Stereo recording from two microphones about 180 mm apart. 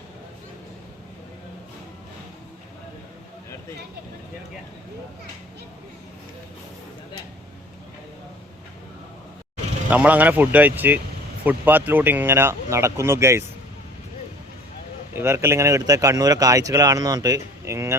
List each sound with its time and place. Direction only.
9.9 s speech: 10° right (ahead or behind)
15.1 s speech: 15° right (ahead or behind)